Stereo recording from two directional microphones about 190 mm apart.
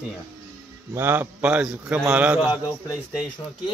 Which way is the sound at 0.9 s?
10° right (ahead or behind).